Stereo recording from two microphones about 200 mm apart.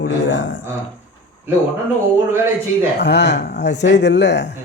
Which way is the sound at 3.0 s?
60° left (ahead or behind).